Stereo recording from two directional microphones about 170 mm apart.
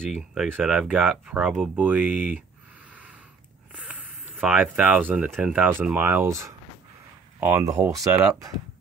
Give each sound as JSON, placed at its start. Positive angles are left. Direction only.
{"t": 0.0, "sound": "speech", "side_deg": 0}
{"t": 3.7, "sound": "a sound", "side_deg": -10}
{"t": 5.3, "sound": "speech", "side_deg": -5}